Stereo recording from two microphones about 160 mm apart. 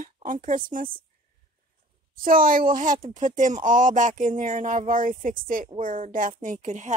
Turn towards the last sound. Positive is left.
turn(degrees=-50)  # may be behind; listen again after turning